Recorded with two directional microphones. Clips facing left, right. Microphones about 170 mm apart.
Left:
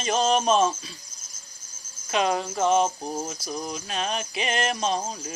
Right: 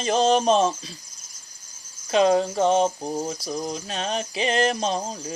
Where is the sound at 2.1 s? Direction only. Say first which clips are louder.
Right 6 dB; 35° right (ahead or behind).